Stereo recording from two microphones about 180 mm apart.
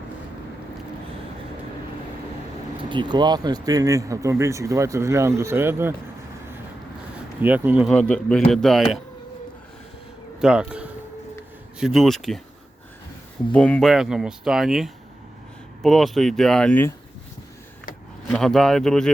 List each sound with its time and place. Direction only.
2.9 s speech: 25° right (ahead or behind)
7.4 s speech: 10° right (ahead or behind)
8.1 s speech: 5° left (ahead or behind)
10.4 s speech: 5° right (ahead or behind)
13.5 s speech: 5° left (ahead or behind)
18.3 s speech: 5° left (ahead or behind)